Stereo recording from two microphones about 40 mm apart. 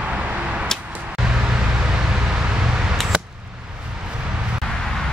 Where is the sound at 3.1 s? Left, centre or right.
Right.